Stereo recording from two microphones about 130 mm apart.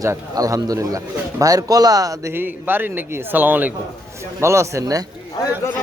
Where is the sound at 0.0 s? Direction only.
25° right (ahead or behind).